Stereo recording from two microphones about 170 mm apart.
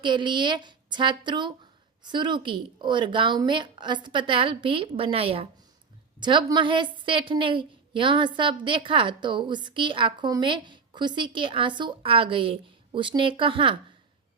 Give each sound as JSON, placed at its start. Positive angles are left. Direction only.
{"t": 0.0, "sound": "a woman's voice", "side_deg": -25}